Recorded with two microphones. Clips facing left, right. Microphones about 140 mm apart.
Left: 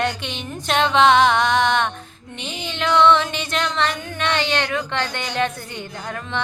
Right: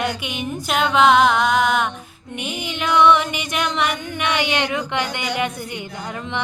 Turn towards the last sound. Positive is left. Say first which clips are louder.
# right 1 dB
turn(degrees=-15)  # may be behind; listen again after turning